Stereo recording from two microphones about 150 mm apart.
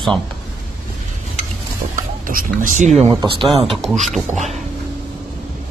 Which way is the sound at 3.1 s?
35° right (ahead or behind).